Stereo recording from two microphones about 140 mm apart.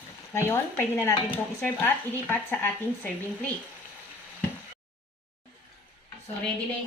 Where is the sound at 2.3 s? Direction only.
15° left (ahead or behind).